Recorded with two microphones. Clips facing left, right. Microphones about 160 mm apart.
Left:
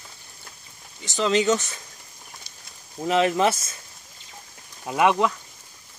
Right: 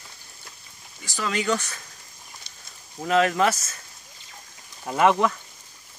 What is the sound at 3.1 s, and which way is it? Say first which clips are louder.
Speech: even; 20° left (ahead or behind).